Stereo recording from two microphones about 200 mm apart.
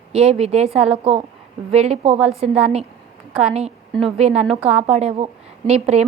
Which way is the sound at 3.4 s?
30° right (ahead or behind).